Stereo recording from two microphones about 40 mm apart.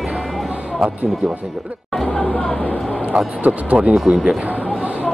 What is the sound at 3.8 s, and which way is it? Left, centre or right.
Speech, right.